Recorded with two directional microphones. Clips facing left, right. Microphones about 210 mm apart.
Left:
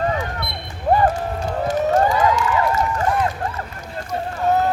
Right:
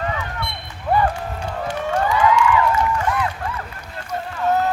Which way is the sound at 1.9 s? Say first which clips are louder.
Right 1 dB; 40° left (ahead or behind).